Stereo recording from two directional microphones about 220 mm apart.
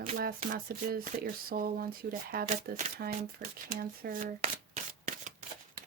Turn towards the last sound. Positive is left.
turn(degrees=-35)  # may be behind; listen again after turning